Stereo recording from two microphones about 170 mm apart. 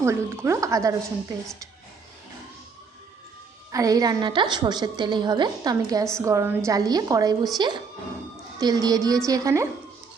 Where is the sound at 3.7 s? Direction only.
20° right (ahead or behind).